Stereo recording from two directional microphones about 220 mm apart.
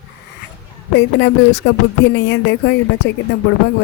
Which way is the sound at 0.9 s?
55° left (ahead or behind).